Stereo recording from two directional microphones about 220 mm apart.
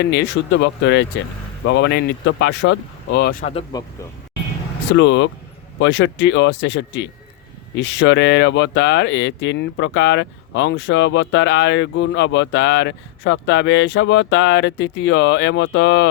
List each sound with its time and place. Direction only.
0.0 s speech: 50° left (ahead or behind)
3.4 s speech: 20° left (ahead or behind)
4.9 s speech: 55° left (ahead or behind)